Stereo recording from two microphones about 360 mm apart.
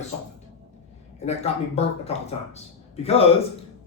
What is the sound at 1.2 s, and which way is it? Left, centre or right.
Speech, centre.